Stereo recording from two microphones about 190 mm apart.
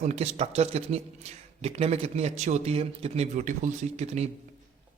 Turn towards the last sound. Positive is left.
turn(degrees=-35)  # may be behind; listen again after turning